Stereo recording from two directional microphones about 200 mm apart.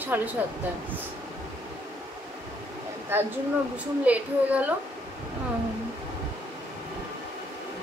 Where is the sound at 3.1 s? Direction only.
10° right (ahead or behind).